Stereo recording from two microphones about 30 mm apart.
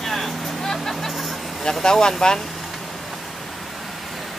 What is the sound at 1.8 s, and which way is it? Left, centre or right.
Speech, centre.